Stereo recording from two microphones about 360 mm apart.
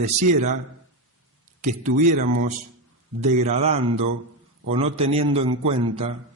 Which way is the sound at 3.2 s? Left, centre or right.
Centre.